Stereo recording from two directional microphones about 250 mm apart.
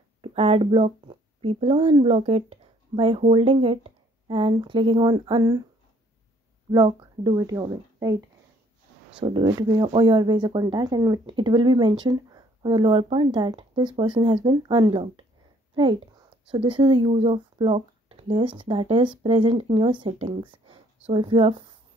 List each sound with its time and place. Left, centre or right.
0.2 s speech: right
6.7 s speech: centre
9.2 s speech: centre